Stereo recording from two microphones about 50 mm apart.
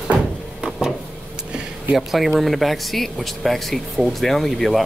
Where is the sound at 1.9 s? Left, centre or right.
Centre.